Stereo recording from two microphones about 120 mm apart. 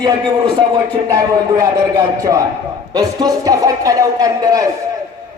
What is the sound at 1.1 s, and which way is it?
A man's voice, 25° right (ahead or behind).